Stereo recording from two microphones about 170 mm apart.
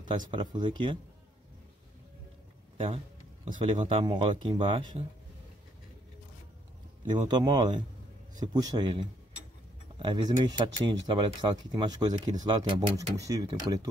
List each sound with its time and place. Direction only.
0.3 s speech: 25° right (ahead or behind)
3.5 s speech: 30° right (ahead or behind)
7.1 s speech: 25° right (ahead or behind)